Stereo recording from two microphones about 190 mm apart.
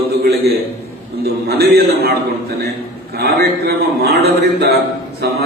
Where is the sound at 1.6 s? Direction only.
55° right (ahead or behind).